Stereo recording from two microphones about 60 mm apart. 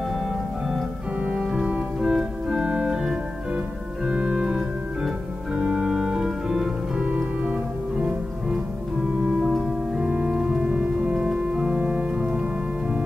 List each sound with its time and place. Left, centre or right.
1.2 s organ: centre
7.0 s music: centre
9.4 s organ: centre
10.0 s organ: right